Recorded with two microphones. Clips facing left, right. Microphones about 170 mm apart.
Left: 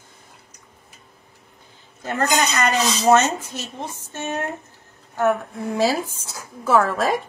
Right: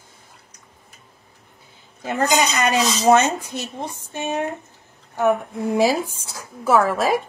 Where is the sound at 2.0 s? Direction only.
10° right (ahead or behind).